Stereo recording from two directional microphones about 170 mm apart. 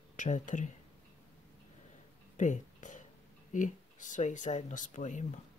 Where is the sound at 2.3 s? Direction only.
45° left (ahead or behind).